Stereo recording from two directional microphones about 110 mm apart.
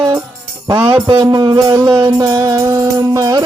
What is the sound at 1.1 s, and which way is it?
Music, 40° right (ahead or behind).